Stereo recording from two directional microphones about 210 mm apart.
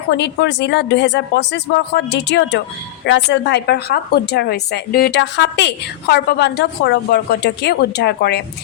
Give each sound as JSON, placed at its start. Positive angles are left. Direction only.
{"t": 0.1, "sound": "a woman's voice", "side_deg": 55}